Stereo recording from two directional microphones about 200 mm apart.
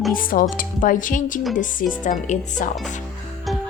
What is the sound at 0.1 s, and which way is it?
A woman's voice, 45° left (ahead or behind).